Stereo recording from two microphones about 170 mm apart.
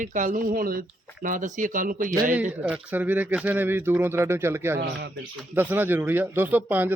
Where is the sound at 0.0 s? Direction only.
50° right (ahead or behind).